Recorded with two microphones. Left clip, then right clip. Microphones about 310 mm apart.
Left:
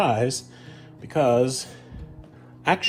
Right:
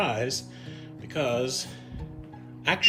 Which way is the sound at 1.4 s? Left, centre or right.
Centre.